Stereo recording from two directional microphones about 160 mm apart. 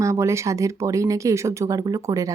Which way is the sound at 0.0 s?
20° right (ahead or behind).